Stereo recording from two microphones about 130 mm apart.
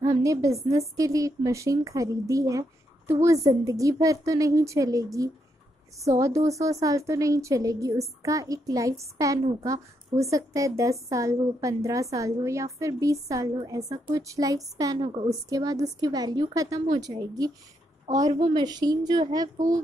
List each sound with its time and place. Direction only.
0.0 s a woman's voice: 25° right (ahead or behind)
18.5 s speech: 30° right (ahead or behind)